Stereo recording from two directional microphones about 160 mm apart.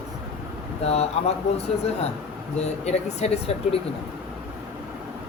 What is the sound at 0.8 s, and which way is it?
Speech, 40° left (ahead or behind).